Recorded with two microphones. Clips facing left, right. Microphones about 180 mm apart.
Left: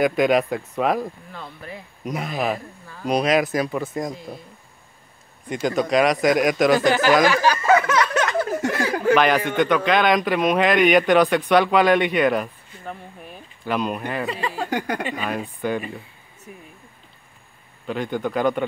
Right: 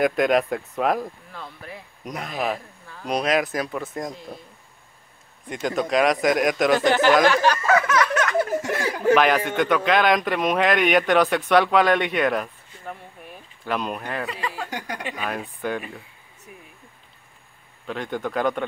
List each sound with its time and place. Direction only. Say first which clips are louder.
0.0 s speech: left 1 dB; centre (ahead or behind)
5.5 s speech: left 3 dB; centre (ahead or behind)
7.6 s a sound: left 2 dB; 25° left (ahead or behind)
9.1 s speech: even; centre (ahead or behind)
14.2 s speech: left 4 dB; 30° left (ahead or behind)
14.7 s a woman's voice: left 7 dB; 60° left (ahead or behind)
15.0 s speech: left 3 dB; centre (ahead or behind)
17.8 s speech: left 3 dB; centre (ahead or behind)